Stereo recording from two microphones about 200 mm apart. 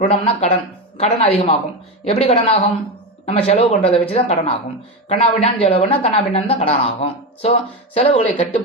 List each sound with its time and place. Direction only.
0.0 s speech: 30° left (ahead or behind)